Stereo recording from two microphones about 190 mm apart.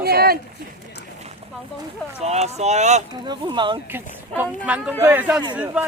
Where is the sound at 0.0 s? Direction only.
55° right (ahead or behind).